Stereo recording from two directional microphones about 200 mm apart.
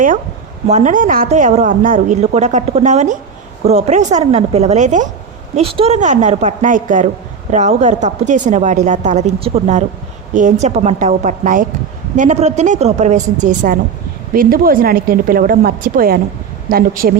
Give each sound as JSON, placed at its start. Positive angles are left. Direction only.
{"t": 0.7, "sound": "a woman's voice", "side_deg": -35}